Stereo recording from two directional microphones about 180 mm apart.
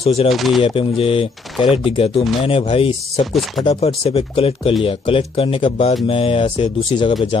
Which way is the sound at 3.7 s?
30° left (ahead or behind).